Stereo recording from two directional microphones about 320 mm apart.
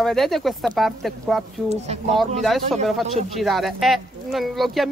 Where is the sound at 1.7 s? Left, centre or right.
Centre.